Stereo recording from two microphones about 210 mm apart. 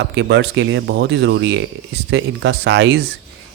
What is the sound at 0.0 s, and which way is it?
Speech, 60° right (ahead or behind).